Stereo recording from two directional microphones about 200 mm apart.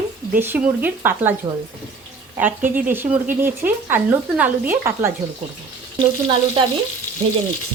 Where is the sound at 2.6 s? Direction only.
40° right (ahead or behind).